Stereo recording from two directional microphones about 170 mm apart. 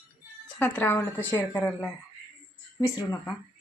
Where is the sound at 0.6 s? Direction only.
10° left (ahead or behind).